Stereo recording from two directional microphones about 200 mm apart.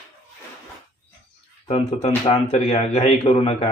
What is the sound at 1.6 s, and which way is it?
Speech, 30° left (ahead or behind).